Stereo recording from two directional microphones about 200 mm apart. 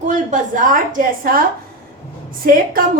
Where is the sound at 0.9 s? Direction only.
45° right (ahead or behind).